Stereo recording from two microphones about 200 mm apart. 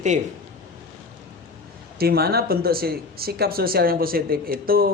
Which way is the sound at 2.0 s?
50° right (ahead or behind).